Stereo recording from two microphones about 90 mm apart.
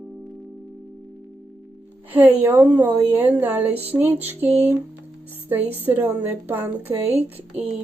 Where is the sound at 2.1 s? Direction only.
20° right (ahead or behind).